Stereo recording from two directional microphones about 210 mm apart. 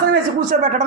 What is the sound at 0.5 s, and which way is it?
Speech, 35° right (ahead or behind).